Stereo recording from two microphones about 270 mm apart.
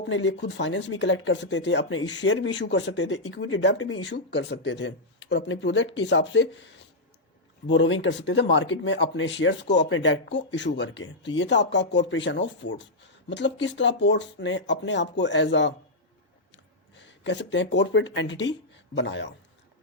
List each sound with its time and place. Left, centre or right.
0.1 s speech: left
17.0 s speech: left